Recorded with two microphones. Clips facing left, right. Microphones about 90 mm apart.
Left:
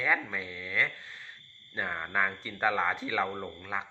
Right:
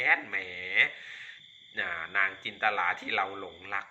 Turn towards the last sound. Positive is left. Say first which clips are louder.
# left 2 dB
turn(degrees=15)  # may be behind; listen again after turning